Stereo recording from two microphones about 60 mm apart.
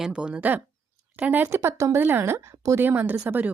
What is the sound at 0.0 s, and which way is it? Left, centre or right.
Speech, centre.